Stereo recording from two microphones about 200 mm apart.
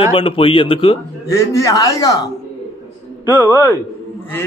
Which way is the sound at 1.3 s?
15° left (ahead or behind).